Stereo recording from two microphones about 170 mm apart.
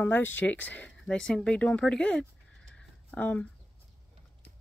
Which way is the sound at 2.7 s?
10° left (ahead or behind).